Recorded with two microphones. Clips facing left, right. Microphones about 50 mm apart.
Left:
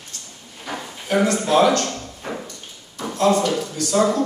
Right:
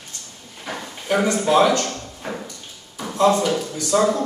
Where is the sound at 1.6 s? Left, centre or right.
Centre.